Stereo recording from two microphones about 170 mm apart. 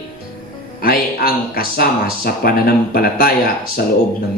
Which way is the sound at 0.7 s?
60° left (ahead or behind).